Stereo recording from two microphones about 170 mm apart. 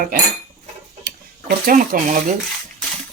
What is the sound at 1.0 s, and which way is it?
Tick-tock, 75° right (ahead or behind).